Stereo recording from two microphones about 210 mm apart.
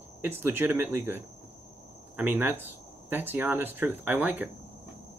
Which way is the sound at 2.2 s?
10° right (ahead or behind).